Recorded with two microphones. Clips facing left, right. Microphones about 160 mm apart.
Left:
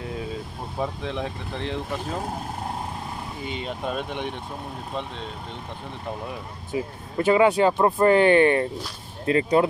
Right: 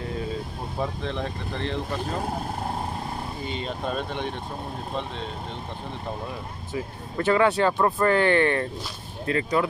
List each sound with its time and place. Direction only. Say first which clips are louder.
0.7 s speech: left 1 dB; 5° left (ahead or behind)
3.4 s speech: left 1 dB; 10° left (ahead or behind)
6.7 s speech: left 4 dB; 15° left (ahead or behind)
9.3 s speech: left 4 dB; 25° left (ahead or behind)